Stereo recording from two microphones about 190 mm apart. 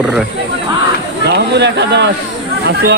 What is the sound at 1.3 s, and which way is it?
Speech, 65° right (ahead or behind).